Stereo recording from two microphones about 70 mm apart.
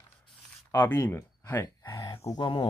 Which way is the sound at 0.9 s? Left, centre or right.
Left.